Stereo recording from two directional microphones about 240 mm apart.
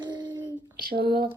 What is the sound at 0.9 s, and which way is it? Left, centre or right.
Speech, right.